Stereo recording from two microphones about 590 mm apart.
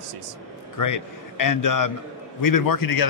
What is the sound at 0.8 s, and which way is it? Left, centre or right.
A man's voice, left.